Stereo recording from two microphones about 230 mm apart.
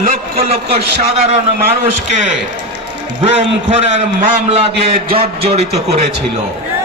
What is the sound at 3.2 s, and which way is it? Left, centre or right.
A man's voice, right.